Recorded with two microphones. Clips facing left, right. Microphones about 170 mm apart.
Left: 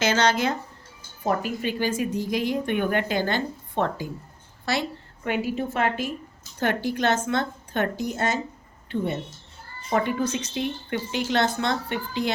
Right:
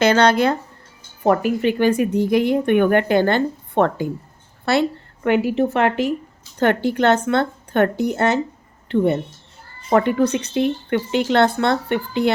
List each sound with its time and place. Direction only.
0.0 s speech: 60° right (ahead or behind)